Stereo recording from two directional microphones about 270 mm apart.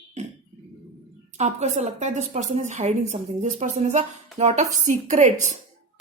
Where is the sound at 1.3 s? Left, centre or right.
Right.